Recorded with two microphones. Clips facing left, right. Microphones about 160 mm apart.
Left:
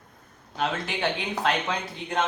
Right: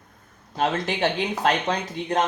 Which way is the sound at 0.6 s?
40° right (ahead or behind).